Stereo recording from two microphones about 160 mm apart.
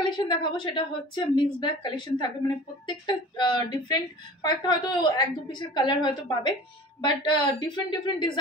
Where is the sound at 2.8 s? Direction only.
30° left (ahead or behind).